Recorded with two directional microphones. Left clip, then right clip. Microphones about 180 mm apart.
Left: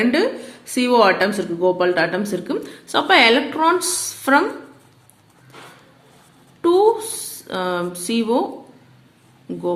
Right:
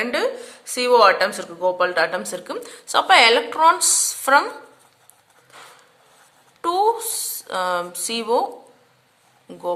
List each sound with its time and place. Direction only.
0.0 s speech: 20° right (ahead or behind)
6.6 s speech: 25° right (ahead or behind)
9.5 s speech: 25° right (ahead or behind)